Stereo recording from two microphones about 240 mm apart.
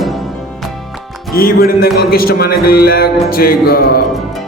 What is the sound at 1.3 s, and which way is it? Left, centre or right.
Speech, left.